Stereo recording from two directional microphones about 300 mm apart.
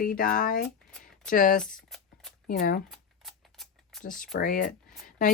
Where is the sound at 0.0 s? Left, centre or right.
Left.